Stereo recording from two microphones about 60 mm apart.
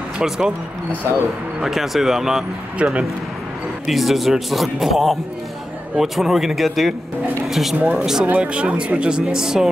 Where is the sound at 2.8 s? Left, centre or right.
Centre.